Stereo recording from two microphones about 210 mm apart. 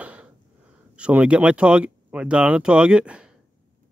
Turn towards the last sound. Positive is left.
turn(degrees=-5)  # may be behind; listen again after turning